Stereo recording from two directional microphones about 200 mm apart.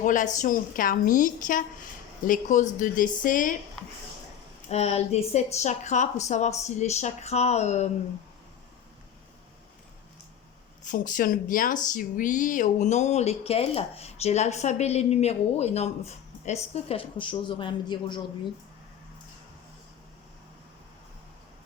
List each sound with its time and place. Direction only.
0.0 s a woman's voice: 40° left (ahead or behind)
4.7 s speech: 30° left (ahead or behind)
10.8 s a woman's voice: 40° left (ahead or behind); by 18.2 s 25° left (ahead or behind)